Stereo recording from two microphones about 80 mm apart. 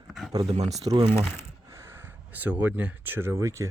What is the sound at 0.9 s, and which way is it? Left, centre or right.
Speech, right.